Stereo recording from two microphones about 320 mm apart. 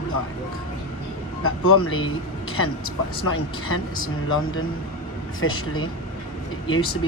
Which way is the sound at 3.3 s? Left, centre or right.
Left.